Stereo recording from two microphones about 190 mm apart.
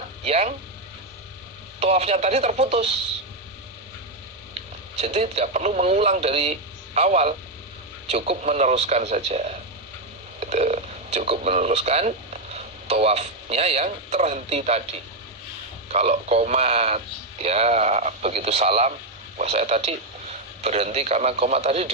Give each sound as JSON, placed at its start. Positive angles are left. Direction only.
{"t": 0.3, "sound": "speech", "side_deg": -35}
{"t": 1.8, "sound": "speech", "side_deg": -35}
{"t": 4.9, "sound": "speech", "side_deg": -35}
{"t": 15.9, "sound": "speech", "side_deg": -35}